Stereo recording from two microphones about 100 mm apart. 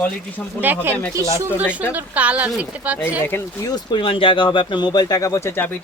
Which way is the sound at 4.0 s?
60° left (ahead or behind).